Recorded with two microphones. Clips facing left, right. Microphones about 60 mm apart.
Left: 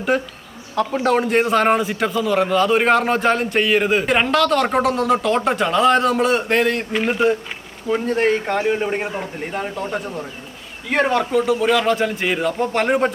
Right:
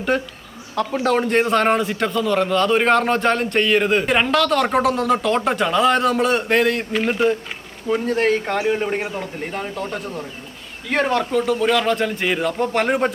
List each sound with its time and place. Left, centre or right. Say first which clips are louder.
0.1 s a man's voice: left 1 dB; centre
9.0 s speech: left 1 dB; centre
9.5 s a man's voice: left 4 dB; centre